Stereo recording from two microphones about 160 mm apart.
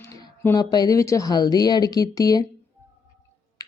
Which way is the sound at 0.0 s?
20° left (ahead or behind).